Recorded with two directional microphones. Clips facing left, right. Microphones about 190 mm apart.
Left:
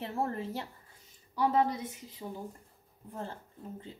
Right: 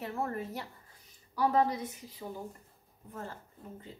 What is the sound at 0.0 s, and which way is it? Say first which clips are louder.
A woman's voice: left 1 dB; 30° left (ahead or behind).